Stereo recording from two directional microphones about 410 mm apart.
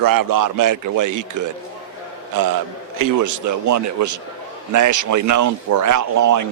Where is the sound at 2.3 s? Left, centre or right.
Right.